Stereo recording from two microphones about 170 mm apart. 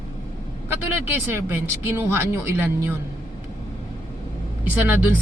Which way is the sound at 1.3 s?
15° right (ahead or behind).